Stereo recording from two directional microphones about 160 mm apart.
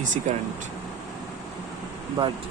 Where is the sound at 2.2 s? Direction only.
30° right (ahead or behind).